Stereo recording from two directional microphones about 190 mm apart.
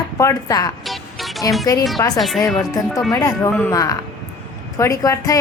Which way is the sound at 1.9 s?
20° left (ahead or behind).